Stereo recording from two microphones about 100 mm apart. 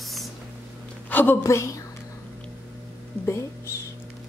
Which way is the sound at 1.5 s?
30° left (ahead or behind).